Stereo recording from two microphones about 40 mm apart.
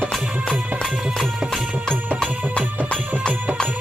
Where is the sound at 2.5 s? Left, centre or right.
Left.